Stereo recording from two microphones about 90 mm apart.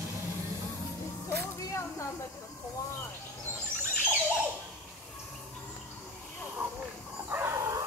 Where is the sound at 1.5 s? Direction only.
40° left (ahead or behind).